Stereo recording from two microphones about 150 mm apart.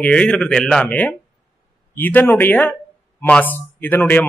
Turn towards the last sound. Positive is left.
turn(degrees=10)  # may be behind; listen again after turning